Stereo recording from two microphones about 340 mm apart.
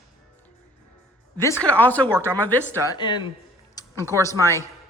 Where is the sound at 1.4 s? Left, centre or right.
Centre.